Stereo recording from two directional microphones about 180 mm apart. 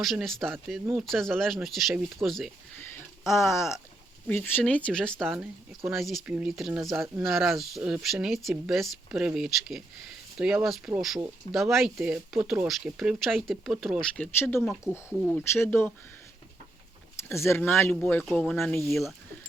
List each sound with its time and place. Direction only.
0.0 s speech: centre (ahead or behind)
2.9 s a sound: 15° left (ahead or behind)
3.5 s speech: 15° left (ahead or behind)
14.6 s speech: centre (ahead or behind)
17.2 s speech: 15° left (ahead or behind)